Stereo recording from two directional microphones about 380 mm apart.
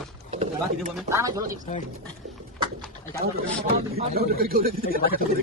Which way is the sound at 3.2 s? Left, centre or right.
Right.